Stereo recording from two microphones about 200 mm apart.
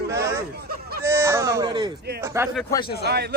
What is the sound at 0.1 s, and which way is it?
Hubbub, 15° right (ahead or behind).